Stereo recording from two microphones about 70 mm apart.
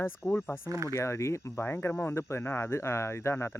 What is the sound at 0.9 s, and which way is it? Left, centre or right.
Speech, left.